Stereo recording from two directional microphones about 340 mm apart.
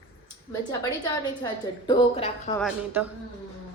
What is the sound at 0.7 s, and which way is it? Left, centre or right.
A woman's voice, centre.